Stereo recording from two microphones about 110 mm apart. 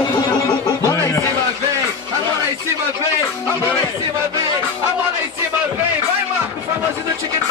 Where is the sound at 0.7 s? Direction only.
30° left (ahead or behind).